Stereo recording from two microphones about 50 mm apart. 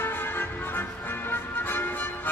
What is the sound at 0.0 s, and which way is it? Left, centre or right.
Music, left.